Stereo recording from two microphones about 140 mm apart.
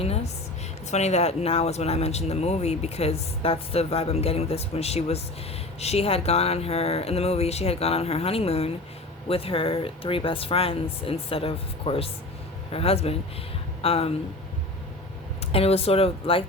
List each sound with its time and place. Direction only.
0.9 s speech: 55° left (ahead or behind)
15.4 s speech: 45° left (ahead or behind)